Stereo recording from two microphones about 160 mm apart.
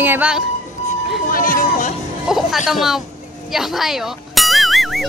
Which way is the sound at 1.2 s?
60° left (ahead or behind).